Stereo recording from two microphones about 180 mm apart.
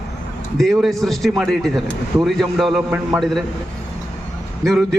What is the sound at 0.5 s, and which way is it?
A man's voice, centre (ahead or behind).